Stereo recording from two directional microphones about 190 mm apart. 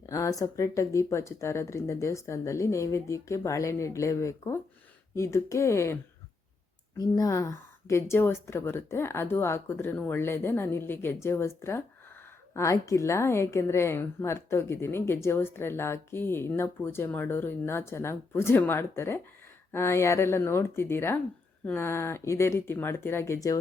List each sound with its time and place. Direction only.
0.0 s a woman's voice: 15° left (ahead or behind)